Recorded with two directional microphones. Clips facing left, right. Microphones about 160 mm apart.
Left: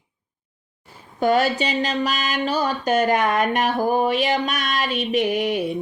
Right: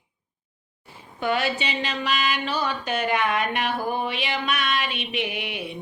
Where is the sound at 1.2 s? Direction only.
40° left (ahead or behind).